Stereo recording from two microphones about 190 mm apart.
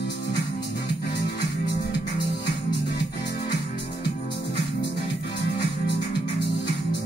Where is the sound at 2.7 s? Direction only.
60° left (ahead or behind).